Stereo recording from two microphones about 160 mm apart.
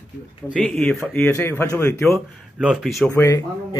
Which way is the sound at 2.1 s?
Centre (ahead or behind).